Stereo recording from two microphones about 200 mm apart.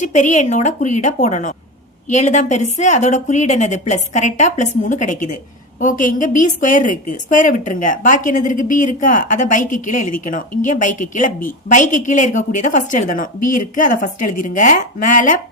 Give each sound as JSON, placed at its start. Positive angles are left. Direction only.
{"t": 0.0, "sound": "a woman's voice", "side_deg": 35}